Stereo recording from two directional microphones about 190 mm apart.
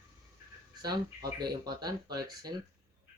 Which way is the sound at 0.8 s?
20° right (ahead or behind).